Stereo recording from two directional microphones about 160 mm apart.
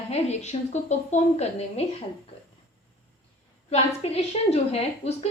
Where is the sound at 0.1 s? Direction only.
45° left (ahead or behind).